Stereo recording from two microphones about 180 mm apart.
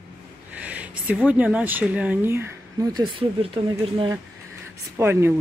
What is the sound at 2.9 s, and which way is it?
Speech, 30° right (ahead or behind).